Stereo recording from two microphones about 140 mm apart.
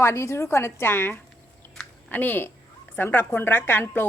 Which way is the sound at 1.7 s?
10° left (ahead or behind).